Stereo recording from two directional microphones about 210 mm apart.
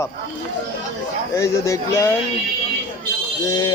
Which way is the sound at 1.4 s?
15° left (ahead or behind).